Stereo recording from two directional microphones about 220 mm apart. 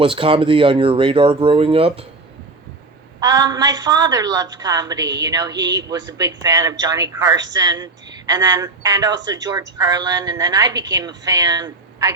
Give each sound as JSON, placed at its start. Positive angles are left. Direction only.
{"t": 0.0, "sound": "speech", "side_deg": -25}
{"t": 3.2, "sound": "a woman's voice", "side_deg": -15}